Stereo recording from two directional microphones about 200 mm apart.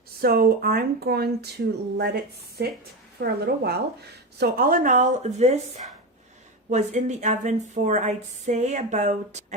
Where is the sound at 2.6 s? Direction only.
55° right (ahead or behind).